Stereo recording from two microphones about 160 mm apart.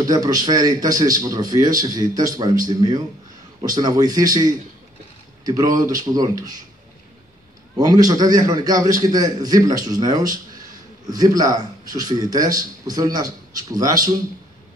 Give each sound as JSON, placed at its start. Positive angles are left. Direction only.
{"t": 0.0, "sound": "a man's voice", "side_deg": -25}
{"t": 7.7, "sound": "speech", "side_deg": -20}